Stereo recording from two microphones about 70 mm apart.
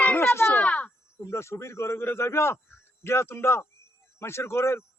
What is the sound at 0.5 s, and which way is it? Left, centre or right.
Speech, left.